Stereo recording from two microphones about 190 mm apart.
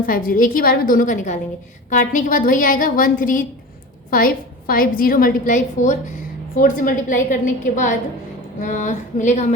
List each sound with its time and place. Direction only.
0.0 s a woman's voice: 45° left (ahead or behind)